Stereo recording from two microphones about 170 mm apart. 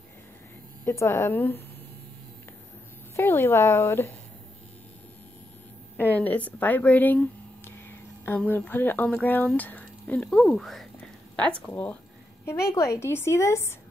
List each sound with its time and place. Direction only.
0.8 s speech: 15° left (ahead or behind)
3.2 s speech: 15° left (ahead or behind)
5.9 s speech: 10° left (ahead or behind)